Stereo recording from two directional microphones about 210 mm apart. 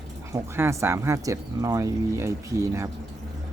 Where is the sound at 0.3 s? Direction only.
10° right (ahead or behind).